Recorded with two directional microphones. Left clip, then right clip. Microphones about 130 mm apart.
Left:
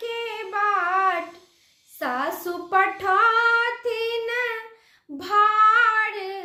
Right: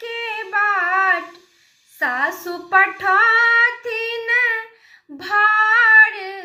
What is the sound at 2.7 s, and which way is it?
Female singing, 45° left (ahead or behind).